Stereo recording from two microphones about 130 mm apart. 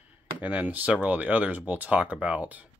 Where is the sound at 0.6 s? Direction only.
10° right (ahead or behind).